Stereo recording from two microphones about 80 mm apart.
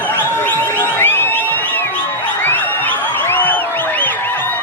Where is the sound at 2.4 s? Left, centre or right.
Left.